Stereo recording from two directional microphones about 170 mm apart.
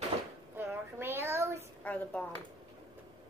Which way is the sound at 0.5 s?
15° right (ahead or behind).